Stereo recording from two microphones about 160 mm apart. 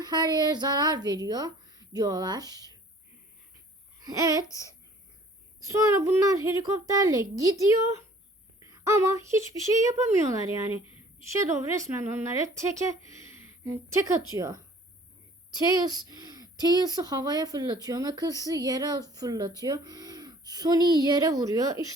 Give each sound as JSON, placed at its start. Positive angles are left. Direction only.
{"t": 0.0, "sound": "speech", "side_deg": -25}
{"t": 4.0, "sound": "speech", "side_deg": -20}
{"t": 5.6, "sound": "a woman's voice", "side_deg": -20}
{"t": 13.1, "sound": "a sound", "side_deg": -20}
{"t": 14.3, "sound": "speech", "side_deg": -20}
{"t": 15.8, "sound": "speech", "side_deg": -25}